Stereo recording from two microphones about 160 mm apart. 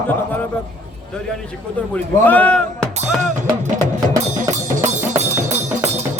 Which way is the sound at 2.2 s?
10° left (ahead or behind).